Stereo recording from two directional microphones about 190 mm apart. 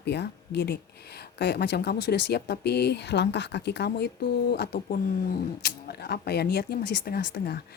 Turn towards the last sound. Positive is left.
turn(degrees=55)  # may be behind; listen again after turning